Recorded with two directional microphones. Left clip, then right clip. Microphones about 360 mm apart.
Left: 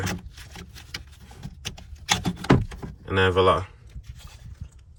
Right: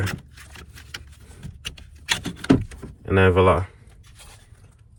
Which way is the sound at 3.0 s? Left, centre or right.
Centre.